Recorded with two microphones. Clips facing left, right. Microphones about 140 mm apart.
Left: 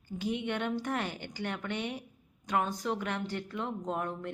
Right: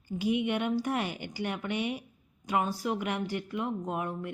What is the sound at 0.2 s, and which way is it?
A woman's voice, 10° right (ahead or behind).